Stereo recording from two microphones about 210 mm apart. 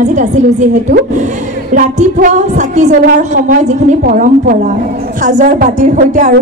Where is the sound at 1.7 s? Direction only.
35° right (ahead or behind).